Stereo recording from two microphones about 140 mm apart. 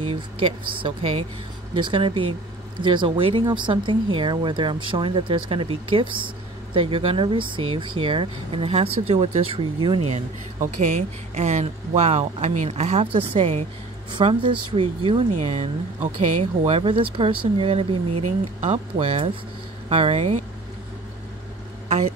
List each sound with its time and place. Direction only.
0.0 s speech: 40° right (ahead or behind)
10.0 s speech: 55° right (ahead or behind); by 15.2 s 40° right (ahead or behind)
15.3 s speech: 50° right (ahead or behind)